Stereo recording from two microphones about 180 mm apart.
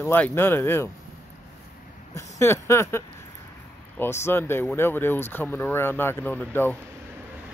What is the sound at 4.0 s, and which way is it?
Speech, 15° left (ahead or behind).